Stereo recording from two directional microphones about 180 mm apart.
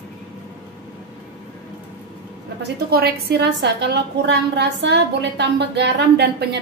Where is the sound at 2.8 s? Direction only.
60° right (ahead or behind).